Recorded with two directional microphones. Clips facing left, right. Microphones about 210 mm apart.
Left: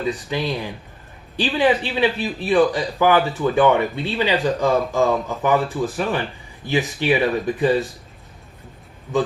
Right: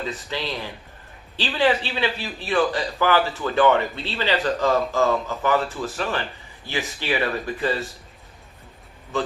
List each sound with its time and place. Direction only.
0.0 s speech: 15° left (ahead or behind)